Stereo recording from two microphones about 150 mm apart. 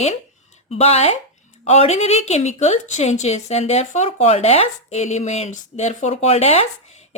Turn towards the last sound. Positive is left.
turn(degrees=45)  # may be behind; listen again after turning